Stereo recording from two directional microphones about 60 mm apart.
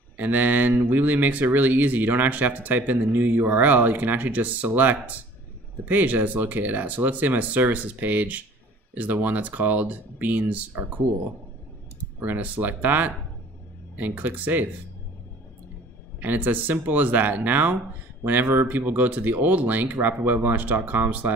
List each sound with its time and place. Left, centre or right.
0.2 s speech: right
12.2 s speech: right
16.2 s speech: right